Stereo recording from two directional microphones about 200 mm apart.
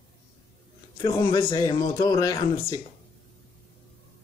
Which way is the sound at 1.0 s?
15° left (ahead or behind).